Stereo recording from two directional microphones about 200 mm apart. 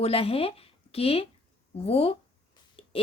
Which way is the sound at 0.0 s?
30° left (ahead or behind).